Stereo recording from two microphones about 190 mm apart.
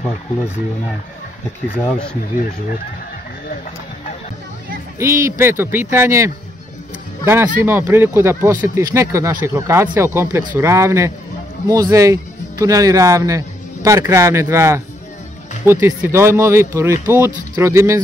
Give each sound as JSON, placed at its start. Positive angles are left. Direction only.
{"t": 4.9, "sound": "speech", "side_deg": -15}